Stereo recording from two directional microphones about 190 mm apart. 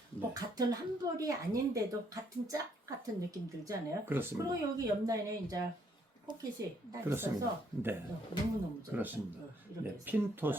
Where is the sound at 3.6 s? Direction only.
15° right (ahead or behind).